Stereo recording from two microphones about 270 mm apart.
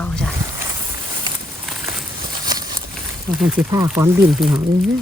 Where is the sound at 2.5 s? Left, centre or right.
Centre.